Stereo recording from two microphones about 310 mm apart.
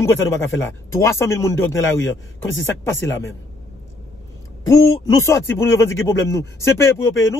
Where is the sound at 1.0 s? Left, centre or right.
Centre.